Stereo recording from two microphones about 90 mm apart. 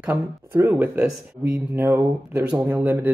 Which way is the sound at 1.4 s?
30° right (ahead or behind).